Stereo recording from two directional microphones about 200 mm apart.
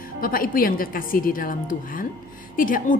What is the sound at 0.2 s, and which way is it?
A woman's voice, 45° left (ahead or behind).